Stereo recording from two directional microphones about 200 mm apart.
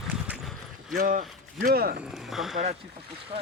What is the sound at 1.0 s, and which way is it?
Speech, 45° right (ahead or behind).